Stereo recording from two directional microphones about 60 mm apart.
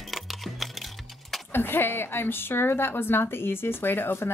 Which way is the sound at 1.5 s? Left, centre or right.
Left.